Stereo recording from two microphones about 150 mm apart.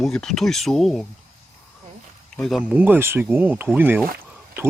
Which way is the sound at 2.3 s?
5° left (ahead or behind).